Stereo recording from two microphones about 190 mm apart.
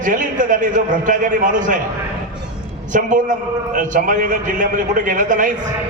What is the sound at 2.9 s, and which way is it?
A man's voice, 45° right (ahead or behind).